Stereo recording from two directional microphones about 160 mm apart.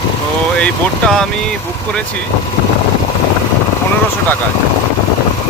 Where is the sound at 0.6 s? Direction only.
5° left (ahead or behind).